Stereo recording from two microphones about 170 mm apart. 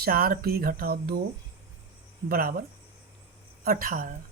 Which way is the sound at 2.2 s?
60° right (ahead or behind).